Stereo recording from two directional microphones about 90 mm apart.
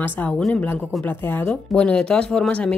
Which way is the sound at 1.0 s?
20° left (ahead or behind).